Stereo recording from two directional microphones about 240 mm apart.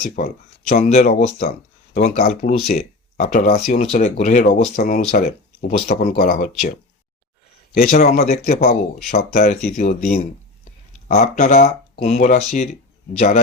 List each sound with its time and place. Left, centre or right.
0.2 s speech: left
7.7 s speech: left